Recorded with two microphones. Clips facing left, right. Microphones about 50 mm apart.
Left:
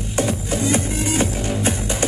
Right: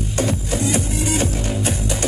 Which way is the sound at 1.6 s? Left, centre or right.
Left.